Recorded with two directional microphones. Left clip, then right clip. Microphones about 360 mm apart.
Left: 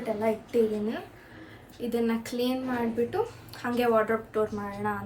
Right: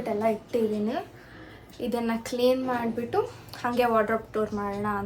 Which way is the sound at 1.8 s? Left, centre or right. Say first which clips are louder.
Even; centre.